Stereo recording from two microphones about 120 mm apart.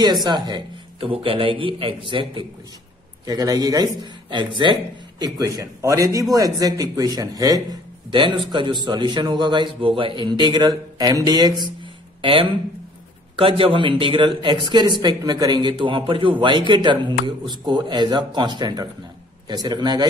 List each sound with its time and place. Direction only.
0.0 s a man's voice: 35° right (ahead or behind)
3.3 s a man's voice: 30° right (ahead or behind)
8.1 s speech: 40° right (ahead or behind)
12.2 s speech: 50° right (ahead or behind)